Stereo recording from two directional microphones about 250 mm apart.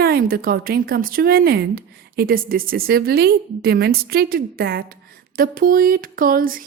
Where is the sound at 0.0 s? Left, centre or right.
Right.